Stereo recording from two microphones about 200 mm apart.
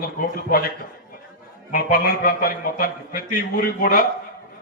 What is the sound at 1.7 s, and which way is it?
A man's voice, 45° left (ahead or behind).